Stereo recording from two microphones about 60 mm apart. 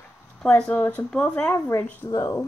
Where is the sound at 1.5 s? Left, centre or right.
Left.